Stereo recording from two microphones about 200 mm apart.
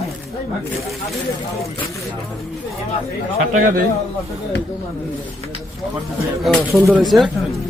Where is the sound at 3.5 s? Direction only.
40° right (ahead or behind).